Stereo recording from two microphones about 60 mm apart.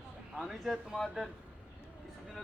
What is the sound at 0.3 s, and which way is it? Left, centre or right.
Speech, centre.